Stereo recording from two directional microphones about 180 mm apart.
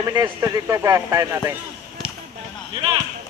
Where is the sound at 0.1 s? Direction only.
20° right (ahead or behind).